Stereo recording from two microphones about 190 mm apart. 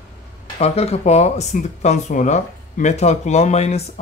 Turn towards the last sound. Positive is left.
turn(degrees=35)  # may be behind; listen again after turning